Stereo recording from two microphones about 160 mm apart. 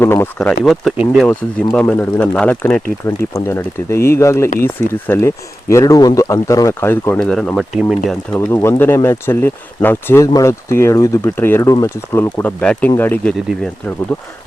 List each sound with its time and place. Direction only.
0.0 s speech: 15° left (ahead or behind)
0.3 s speech: 5° left (ahead or behind)
8.3 s speech: 15° left (ahead or behind)